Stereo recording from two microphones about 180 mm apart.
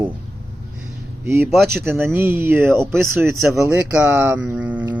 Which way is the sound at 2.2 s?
10° right (ahead or behind).